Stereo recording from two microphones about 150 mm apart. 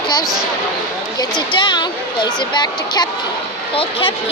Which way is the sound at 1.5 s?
30° left (ahead or behind).